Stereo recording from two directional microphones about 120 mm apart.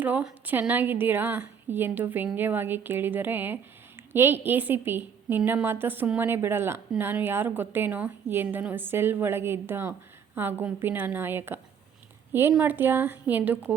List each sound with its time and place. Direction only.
0.0 s a woman's voice: 15° right (ahead or behind)